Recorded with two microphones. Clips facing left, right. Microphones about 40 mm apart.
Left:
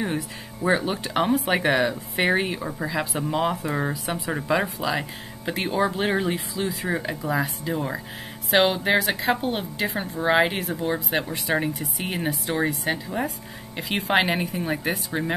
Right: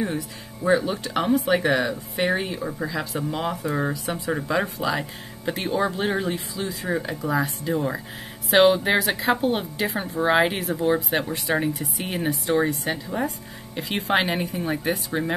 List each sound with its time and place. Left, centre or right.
0.7 s speech: left
2.2 s speech: left
2.6 s speech: centre
7.2 s a woman's voice: centre